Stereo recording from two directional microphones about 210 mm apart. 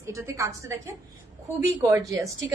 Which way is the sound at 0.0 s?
15° right (ahead or behind).